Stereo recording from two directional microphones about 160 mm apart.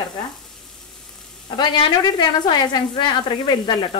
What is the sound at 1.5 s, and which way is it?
A woman's voice, 30° left (ahead or behind).